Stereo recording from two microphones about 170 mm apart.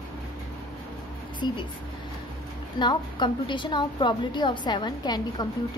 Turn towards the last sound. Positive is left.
turn(degrees=25)  # may be behind; listen again after turning